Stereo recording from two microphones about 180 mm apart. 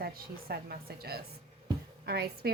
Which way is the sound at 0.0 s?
60° right (ahead or behind).